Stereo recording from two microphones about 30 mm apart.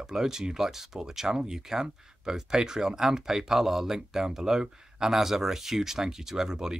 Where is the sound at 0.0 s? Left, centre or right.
Centre.